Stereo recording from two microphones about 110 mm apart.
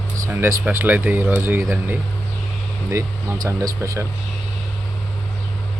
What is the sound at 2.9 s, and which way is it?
Speech, 30° right (ahead or behind).